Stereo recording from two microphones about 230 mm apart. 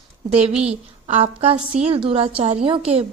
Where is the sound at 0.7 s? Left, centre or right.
Right.